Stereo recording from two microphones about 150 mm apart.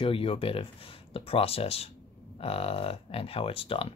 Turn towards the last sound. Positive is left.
turn(degrees=40)  # may be behind; listen again after turning